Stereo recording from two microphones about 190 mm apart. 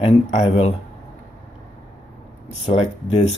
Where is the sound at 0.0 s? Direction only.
30° left (ahead or behind).